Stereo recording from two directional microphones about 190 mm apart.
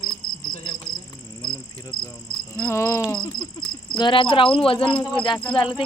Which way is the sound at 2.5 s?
15° left (ahead or behind).